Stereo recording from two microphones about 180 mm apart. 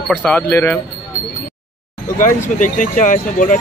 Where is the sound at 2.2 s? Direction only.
45° left (ahead or behind).